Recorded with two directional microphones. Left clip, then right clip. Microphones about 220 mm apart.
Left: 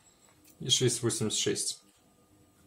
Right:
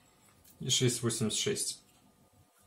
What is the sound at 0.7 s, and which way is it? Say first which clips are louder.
Speech: left 3 dB; 20° left (ahead or behind).